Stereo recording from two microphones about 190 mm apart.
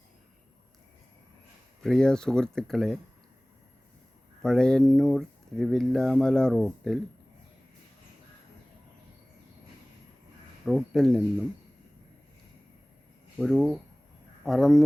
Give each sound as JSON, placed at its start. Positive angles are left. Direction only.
{"t": 1.8, "sound": "speech", "side_deg": 5}
{"t": 4.4, "sound": "speech", "side_deg": 5}
{"t": 10.7, "sound": "speech", "side_deg": 0}
{"t": 13.4, "sound": "speech", "side_deg": 0}